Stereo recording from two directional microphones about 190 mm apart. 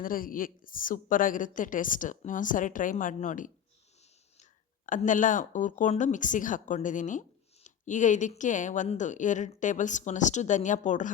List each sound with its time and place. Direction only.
0.0 s a woman's voice: 45° left (ahead or behind)
4.9 s speech: 45° left (ahead or behind)